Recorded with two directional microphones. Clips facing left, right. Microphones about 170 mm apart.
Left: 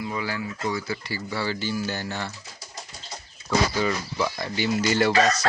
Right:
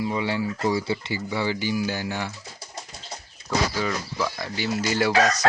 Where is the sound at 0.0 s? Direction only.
25° right (ahead or behind).